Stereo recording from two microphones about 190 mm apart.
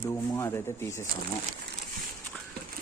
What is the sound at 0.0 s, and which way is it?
Speech, 15° left (ahead or behind).